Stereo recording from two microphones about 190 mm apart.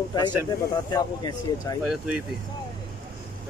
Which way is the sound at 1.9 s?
5° right (ahead or behind).